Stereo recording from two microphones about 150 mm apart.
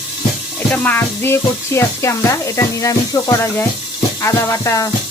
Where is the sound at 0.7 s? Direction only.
10° left (ahead or behind).